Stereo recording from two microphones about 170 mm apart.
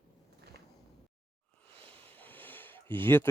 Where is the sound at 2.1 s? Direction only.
10° left (ahead or behind).